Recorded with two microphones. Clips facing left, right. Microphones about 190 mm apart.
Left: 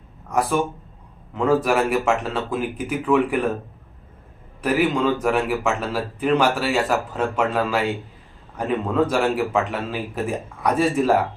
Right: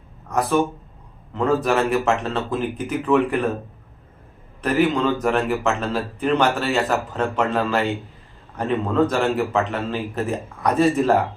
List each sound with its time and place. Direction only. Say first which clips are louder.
0.3 s speech: right 1 dB; 10° left (ahead or behind)
4.6 s speech: right 1 dB; 10° left (ahead or behind)